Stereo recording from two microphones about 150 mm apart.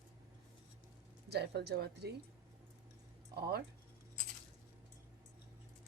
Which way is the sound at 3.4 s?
90° right.